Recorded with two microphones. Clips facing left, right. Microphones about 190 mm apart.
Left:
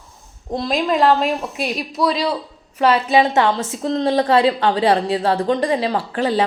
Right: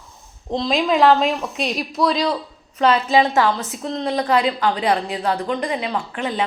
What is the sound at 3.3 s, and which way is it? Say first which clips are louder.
Speech: left 1 dB; 20° left (ahead or behind).